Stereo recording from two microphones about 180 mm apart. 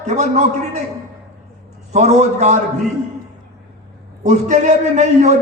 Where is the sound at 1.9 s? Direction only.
40° right (ahead or behind).